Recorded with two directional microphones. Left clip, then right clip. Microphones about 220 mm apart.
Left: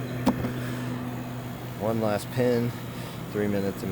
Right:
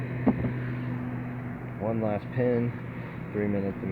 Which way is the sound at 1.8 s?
20° left (ahead or behind).